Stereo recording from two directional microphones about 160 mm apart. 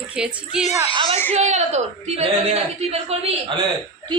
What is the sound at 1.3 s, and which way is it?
A woman's voice, 45° right (ahead or behind).